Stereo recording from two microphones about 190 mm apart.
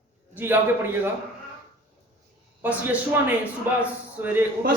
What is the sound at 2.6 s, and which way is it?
A man's voice, 10° right (ahead or behind).